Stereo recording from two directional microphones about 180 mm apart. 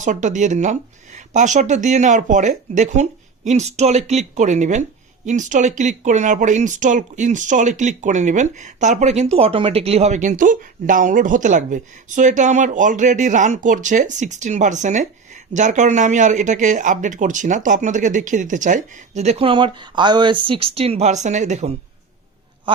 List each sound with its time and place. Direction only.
0.0 s speech: 45° right (ahead or behind)